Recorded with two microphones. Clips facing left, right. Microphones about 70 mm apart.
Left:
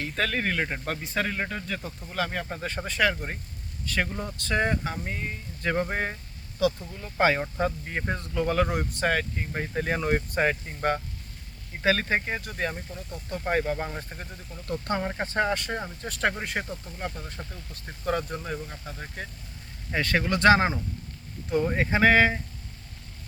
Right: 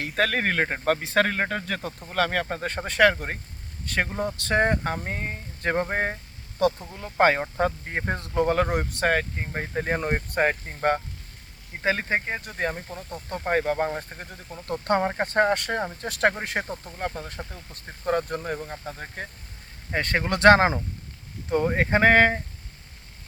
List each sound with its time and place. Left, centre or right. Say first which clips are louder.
0.0 s speech: right 4 dB; right
1.0 s speech: right 6 dB; right
2.6 s speech: right 5 dB; right
6.6 s speech: right 2 dB; right
11.9 s speech: even; centre
12.5 s speech: right 2 dB; right
21.8 s speech: right 2 dB; right